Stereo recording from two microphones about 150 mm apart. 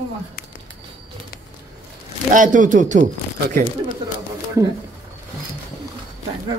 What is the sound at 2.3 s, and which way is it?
Speech, 60° right (ahead or behind).